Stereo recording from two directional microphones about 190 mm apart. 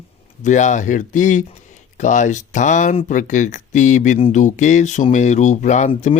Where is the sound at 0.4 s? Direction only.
40° left (ahead or behind).